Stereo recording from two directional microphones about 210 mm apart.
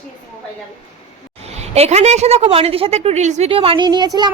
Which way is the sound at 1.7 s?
30° right (ahead or behind).